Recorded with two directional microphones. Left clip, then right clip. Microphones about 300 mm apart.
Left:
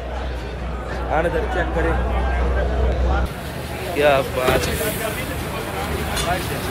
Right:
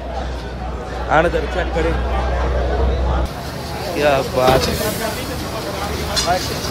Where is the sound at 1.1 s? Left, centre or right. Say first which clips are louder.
Right 7 dB; right.